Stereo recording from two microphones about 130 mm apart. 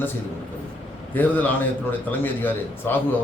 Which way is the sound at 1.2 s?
10° left (ahead or behind).